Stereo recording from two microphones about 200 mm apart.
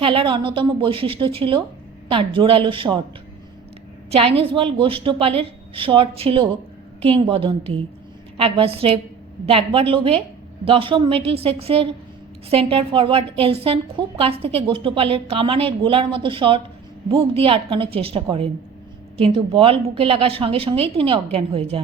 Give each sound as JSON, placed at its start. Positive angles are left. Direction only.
{"t": 0.0, "sound": "a woman's voice", "side_deg": -25}
{"t": 4.1, "sound": "a woman's voice", "side_deg": -30}